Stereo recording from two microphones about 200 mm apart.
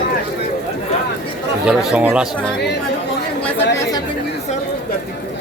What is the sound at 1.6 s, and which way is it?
Speech, 5° right (ahead or behind).